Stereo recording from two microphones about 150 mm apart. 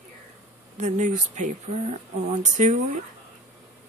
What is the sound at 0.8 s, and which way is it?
A woman's voice, 55° right (ahead or behind).